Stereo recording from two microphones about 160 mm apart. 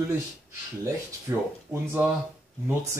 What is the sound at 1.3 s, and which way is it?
Speech, 20° right (ahead or behind).